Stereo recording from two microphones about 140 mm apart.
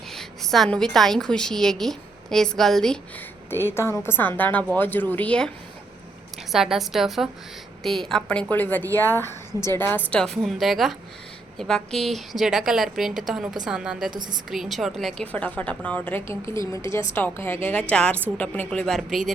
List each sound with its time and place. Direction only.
0.1 s a woman's voice: centre (ahead or behind)
3.5 s a woman's voice: 15° left (ahead or behind)
6.5 s a woman's voice: centre (ahead or behind)
14.1 s a woman's voice: 30° right (ahead or behind)
14.5 s a woman's voice: centre (ahead or behind)
15.3 s a woman's voice: 10° left (ahead or behind)